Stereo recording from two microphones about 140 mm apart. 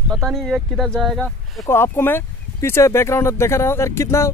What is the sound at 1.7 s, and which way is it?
Speech, 15° left (ahead or behind).